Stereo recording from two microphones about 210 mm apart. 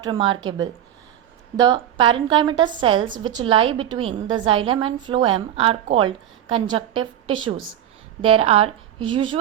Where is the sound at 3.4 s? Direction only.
25° right (ahead or behind).